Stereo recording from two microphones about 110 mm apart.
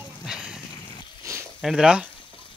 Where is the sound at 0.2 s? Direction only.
5° right (ahead or behind).